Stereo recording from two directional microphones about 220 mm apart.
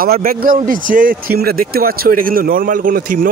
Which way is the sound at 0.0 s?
40° right (ahead or behind).